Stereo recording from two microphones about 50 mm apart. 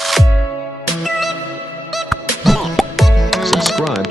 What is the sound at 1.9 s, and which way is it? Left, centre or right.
Music, centre.